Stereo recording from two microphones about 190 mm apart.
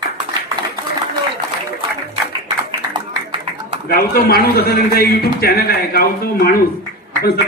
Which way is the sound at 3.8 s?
50° left (ahead or behind).